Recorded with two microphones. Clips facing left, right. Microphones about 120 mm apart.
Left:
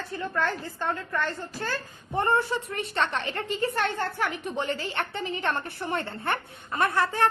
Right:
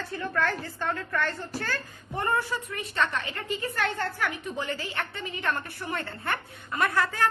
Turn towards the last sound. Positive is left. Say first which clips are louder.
# left 2 dB
turn(degrees=25)  # may be behind; listen again after turning